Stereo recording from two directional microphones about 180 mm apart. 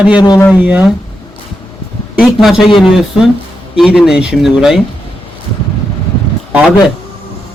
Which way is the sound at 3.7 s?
5° right (ahead or behind).